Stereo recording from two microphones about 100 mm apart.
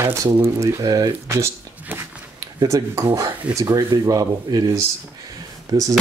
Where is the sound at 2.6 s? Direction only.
35° right (ahead or behind).